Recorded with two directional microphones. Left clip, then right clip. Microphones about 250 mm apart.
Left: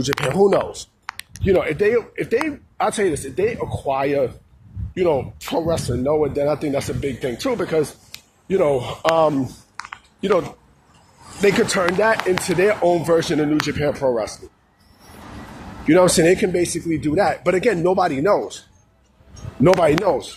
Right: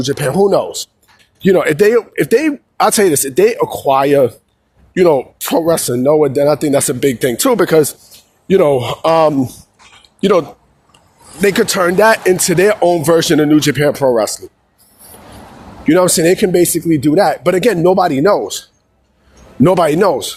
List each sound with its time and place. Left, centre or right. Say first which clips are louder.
0.0 s speech: right 4 dB; centre
1.4 s a man's voice: right 7 dB; right
11.3 s speech: right 5 dB; right
15.9 s speech: right 3 dB; right
19.6 s a man's voice: right 5 dB; right